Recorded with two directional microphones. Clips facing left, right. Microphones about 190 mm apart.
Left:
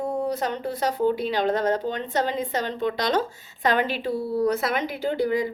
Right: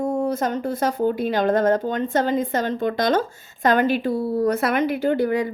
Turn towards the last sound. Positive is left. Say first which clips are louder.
# right 3 dB
turn(degrees=-55)  # may be behind; listen again after turning